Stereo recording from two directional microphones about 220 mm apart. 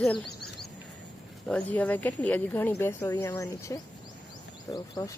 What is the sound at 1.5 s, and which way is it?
Speech, 5° left (ahead or behind).